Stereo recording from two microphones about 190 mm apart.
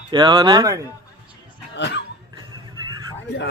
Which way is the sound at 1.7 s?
65° left (ahead or behind).